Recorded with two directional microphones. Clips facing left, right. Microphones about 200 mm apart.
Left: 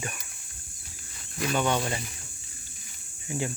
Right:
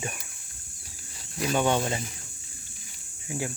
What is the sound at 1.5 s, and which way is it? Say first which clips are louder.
Speech: right 2 dB; 15° right (ahead or behind).